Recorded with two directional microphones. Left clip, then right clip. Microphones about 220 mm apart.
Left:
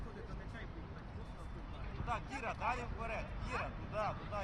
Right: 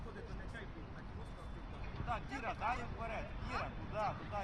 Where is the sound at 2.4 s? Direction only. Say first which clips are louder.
Even; 30° left (ahead or behind).